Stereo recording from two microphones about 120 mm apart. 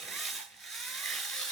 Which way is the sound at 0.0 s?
Centre (ahead or behind).